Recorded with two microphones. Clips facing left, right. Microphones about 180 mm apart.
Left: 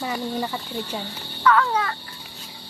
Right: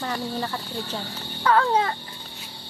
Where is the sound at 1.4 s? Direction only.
30° right (ahead or behind).